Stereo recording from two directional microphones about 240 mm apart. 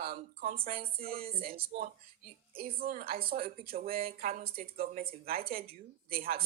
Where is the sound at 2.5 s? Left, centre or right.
Right.